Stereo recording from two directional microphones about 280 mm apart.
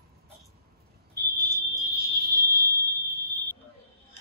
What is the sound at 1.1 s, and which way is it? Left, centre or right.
Fire alarm, right.